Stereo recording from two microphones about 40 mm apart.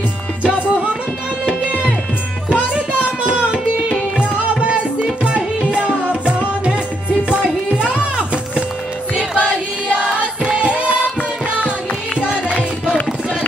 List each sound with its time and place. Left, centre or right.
0.4 s music: right
2.5 s music: right
9.1 s choir: right
12.2 s music: right